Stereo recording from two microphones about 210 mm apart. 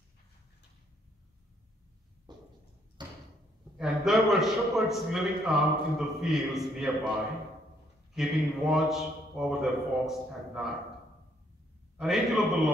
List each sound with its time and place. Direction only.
2.3 s a sound: 20° right (ahead or behind)
3.7 s a man's voice: centre (ahead or behind)
8.1 s a man's voice: centre (ahead or behind)
12.0 s a man's voice: centre (ahead or behind)